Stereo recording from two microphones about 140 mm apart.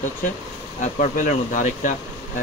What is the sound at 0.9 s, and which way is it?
Speech, 65° left (ahead or behind).